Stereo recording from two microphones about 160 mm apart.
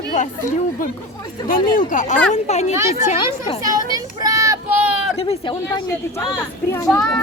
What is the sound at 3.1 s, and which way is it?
Speech, 30° left (ahead or behind).